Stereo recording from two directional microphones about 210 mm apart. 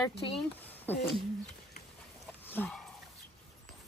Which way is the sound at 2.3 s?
10° left (ahead or behind).